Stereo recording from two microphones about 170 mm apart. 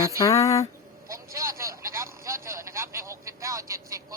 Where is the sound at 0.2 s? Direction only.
20° left (ahead or behind).